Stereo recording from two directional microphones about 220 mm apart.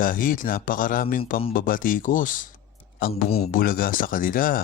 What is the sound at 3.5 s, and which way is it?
Speech, 40° left (ahead or behind).